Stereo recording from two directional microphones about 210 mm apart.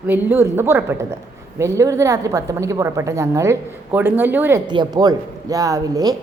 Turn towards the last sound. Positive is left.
turn(degrees=-15)  # may be behind; listen again after turning